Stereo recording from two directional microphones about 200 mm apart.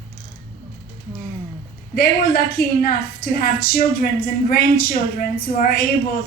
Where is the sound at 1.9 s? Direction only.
50° left (ahead or behind).